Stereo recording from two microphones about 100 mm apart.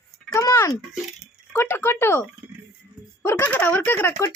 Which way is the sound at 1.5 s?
25° left (ahead or behind).